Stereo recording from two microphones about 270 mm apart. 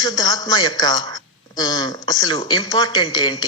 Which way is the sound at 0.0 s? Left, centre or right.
Centre.